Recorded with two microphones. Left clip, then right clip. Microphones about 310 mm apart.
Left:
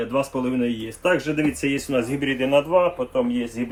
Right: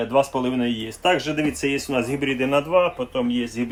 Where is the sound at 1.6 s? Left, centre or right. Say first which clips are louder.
Even; centre; by 3.4 s right.